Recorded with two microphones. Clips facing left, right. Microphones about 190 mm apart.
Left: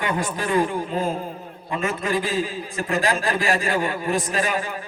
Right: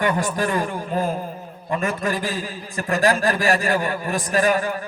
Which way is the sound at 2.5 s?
45° right (ahead or behind).